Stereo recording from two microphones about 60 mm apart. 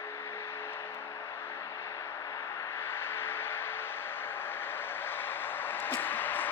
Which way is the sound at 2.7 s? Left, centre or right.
Left.